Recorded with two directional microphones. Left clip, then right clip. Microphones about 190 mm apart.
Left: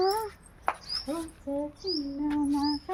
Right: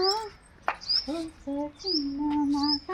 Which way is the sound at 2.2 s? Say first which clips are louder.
Even; 10° right (ahead or behind).